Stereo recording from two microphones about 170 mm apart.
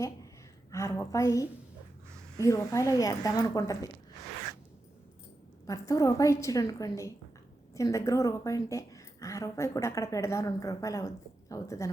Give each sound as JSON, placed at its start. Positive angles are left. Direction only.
{"t": 0.7, "sound": "a woman's voice", "side_deg": 20}
{"t": 5.6, "sound": "a woman's voice", "side_deg": 20}